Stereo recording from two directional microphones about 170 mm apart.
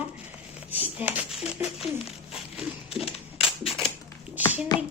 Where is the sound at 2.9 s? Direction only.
35° left (ahead or behind).